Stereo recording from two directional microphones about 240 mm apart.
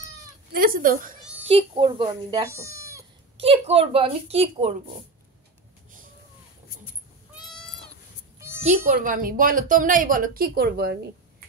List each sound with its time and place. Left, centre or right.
0.7 s a woman's voice: right
1.5 s speech: centre
3.3 s a woman's voice: right
7.4 s goat: centre
8.4 s a sound: centre
8.9 s a woman's voice: right